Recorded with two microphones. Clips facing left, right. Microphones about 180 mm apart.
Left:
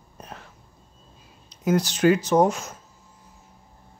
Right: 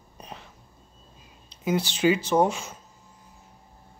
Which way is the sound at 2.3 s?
10° right (ahead or behind).